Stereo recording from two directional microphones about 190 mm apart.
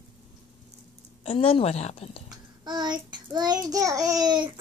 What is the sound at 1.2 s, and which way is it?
A woman's voice, 30° left (ahead or behind).